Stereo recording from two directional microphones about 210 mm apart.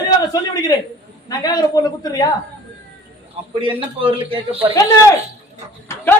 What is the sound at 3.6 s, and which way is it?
Speech, 25° right (ahead or behind).